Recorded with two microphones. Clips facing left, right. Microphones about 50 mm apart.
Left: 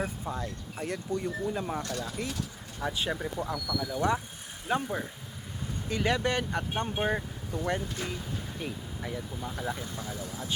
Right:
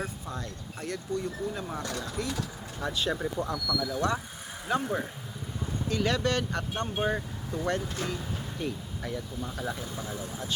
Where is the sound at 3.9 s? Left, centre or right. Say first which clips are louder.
Left 1 dB; centre.